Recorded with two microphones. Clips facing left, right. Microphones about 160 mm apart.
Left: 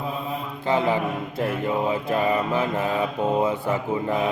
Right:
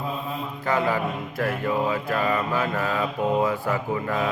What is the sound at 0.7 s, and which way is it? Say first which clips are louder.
Mantra: left 2 dB; 20° left (ahead or behind).